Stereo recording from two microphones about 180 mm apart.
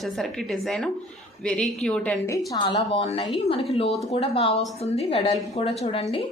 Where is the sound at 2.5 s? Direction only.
25° left (ahead or behind).